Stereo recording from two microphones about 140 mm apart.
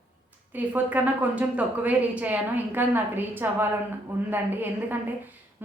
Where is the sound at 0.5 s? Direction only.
10° right (ahead or behind).